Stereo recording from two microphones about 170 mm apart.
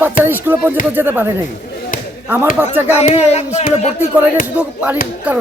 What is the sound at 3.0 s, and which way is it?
Speech, 40° left (ahead or behind).